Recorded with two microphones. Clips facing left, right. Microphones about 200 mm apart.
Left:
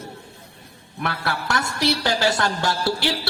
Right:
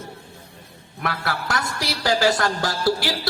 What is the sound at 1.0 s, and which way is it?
A woman's voice, 30° left (ahead or behind).